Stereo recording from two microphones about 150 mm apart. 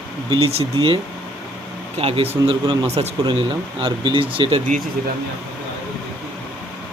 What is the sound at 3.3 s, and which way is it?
Speech, 35° right (ahead or behind).